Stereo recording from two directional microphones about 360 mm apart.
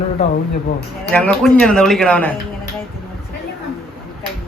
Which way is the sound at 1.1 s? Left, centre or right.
Centre.